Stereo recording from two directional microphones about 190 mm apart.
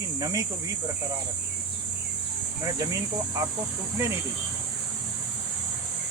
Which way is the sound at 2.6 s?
20° right (ahead or behind).